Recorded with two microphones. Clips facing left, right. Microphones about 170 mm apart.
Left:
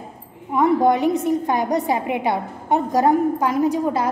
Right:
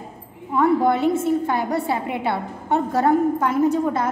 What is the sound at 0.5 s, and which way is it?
A woman's voice, 15° left (ahead or behind).